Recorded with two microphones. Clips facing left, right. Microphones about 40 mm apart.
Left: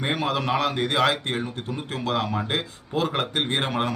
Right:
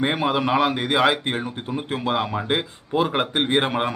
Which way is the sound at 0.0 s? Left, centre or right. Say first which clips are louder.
Right 4 dB; centre.